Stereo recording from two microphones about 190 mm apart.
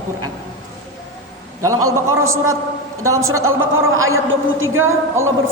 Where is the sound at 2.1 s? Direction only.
90° right.